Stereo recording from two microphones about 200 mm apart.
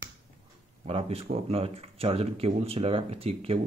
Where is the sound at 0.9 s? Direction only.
30° right (ahead or behind).